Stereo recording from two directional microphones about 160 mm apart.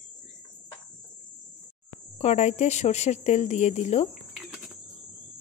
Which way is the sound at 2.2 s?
45° left (ahead or behind).